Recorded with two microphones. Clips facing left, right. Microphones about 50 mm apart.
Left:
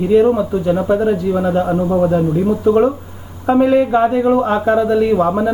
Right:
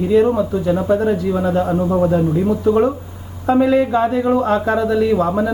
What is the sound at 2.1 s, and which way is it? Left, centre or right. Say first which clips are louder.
Speech: left 1 dB; left.